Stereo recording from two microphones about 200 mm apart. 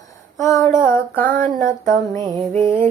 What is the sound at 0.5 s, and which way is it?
Female singing, 15° left (ahead or behind).